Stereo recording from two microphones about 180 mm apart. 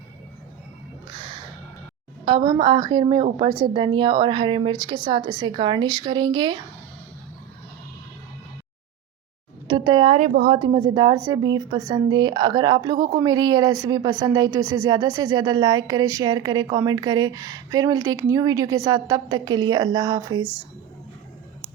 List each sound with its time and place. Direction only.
2.2 s a woman's voice: 25° right (ahead or behind)
9.6 s speech: 25° right (ahead or behind)
10.2 s a woman's voice: 50° right (ahead or behind)
10.6 s a woman's voice: 25° right (ahead or behind)